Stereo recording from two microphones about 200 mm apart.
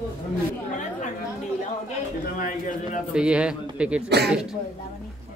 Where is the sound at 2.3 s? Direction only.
40° left (ahead or behind).